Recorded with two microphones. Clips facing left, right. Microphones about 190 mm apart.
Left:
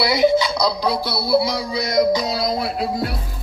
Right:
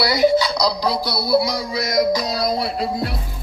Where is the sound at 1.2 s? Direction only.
25° left (ahead or behind).